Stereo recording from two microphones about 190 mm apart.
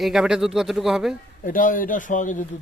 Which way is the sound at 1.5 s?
45° left (ahead or behind).